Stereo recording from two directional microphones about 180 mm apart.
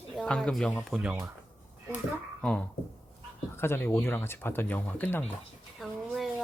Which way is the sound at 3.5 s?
15° left (ahead or behind).